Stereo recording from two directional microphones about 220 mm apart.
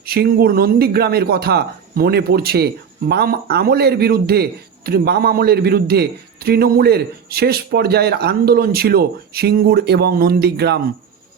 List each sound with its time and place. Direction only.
0.0 s speech: 45° right (ahead or behind)